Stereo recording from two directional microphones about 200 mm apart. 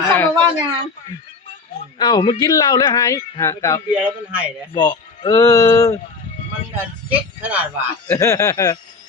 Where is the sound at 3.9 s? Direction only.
10° right (ahead or behind).